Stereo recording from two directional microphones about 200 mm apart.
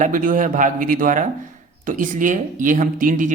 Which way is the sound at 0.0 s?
40° right (ahead or behind).